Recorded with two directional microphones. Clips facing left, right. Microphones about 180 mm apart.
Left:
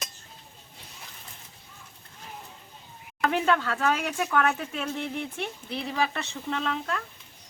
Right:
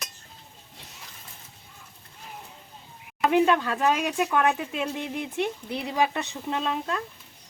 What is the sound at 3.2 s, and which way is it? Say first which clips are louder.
Speech: right 4 dB; 15° right (ahead or behind).